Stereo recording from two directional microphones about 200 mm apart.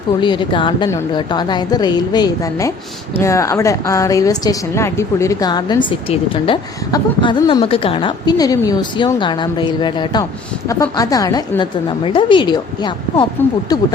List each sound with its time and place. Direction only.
0.2 s a woman's voice: 25° left (ahead or behind)